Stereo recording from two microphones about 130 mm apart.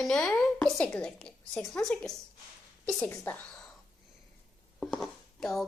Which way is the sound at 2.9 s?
15° left (ahead or behind).